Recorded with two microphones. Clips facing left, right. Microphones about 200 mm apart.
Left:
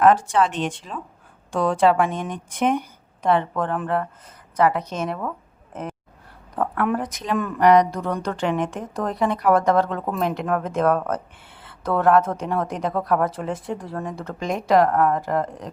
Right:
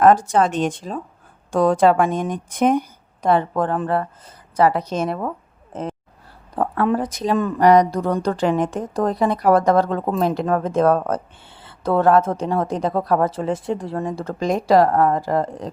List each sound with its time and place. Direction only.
0.0 s speech: 40° right (ahead or behind)
6.6 s a woman's voice: 30° right (ahead or behind)